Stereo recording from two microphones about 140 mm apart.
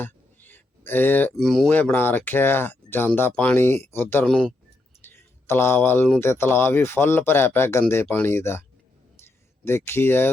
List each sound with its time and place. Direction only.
0.0 s a sound: 15° left (ahead or behind)
1.4 s speech: centre (ahead or behind)
1.7 s speech: 15° left (ahead or behind)
4.3 s speech: 5° left (ahead or behind)
5.0 s a sound: 15° left (ahead or behind)
6.1 s speech: 15° left (ahead or behind)
9.6 s speech: 15° left (ahead or behind)